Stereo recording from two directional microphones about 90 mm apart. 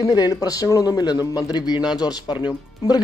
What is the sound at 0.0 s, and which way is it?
Speech, 45° left (ahead or behind).